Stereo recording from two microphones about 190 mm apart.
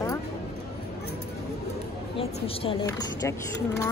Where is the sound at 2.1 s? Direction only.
30° left (ahead or behind).